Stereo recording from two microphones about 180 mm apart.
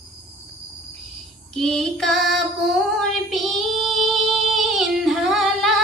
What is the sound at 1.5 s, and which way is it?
Child singing, 5° left (ahead or behind).